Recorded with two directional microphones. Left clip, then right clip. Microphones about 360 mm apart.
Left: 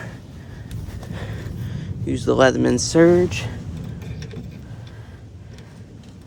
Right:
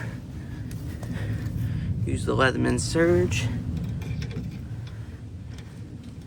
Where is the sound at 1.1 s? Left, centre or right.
Left.